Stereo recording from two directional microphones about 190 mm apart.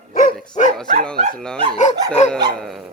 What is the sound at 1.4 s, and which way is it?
Speech, 5° left (ahead or behind).